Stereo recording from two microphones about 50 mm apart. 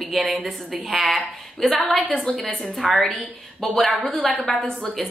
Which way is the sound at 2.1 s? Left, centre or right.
Centre.